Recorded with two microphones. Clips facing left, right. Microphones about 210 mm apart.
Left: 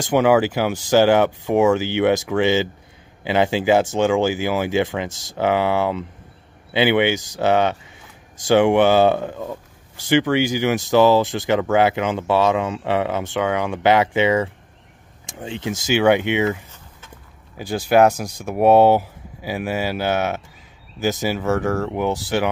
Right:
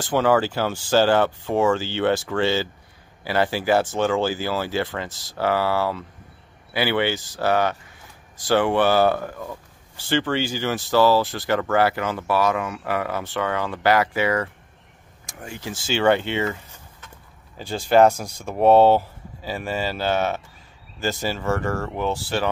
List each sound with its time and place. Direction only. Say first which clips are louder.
0.0 s speech: left 4 dB; 15° left (ahead or behind)
17.6 s speech: left 1 dB; 10° left (ahead or behind)